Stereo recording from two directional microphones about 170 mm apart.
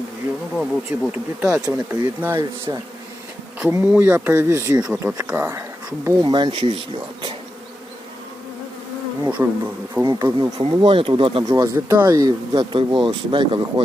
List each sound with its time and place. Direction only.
0.5 s speech: centre (ahead or behind); by 6.7 s 30° right (ahead or behind)
9.4 s speech: 10° right (ahead or behind)
10.0 s speech: 25° right (ahead or behind)
11.4 s speech: 20° right (ahead or behind)